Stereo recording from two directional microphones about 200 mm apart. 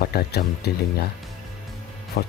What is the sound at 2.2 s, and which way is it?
Speech, 50° left (ahead or behind).